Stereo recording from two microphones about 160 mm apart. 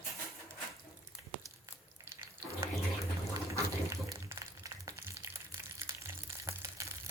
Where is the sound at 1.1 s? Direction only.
15° right (ahead or behind).